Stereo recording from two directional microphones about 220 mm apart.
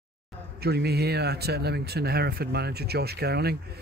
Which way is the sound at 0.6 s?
45° right (ahead or behind).